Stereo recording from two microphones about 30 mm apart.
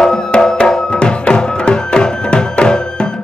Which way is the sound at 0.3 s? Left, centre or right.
Left.